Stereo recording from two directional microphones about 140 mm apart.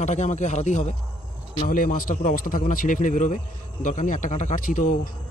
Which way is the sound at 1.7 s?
85° left.